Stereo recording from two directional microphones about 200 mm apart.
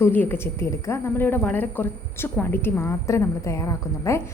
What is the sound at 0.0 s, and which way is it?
A woman's voice, 10° left (ahead or behind).